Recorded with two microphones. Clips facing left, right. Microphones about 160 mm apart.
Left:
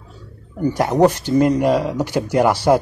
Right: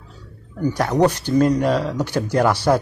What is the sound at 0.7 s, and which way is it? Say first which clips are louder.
Speech: left 3 dB; 20° left (ahead or behind).